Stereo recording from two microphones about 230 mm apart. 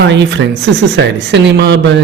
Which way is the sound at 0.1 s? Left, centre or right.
Right.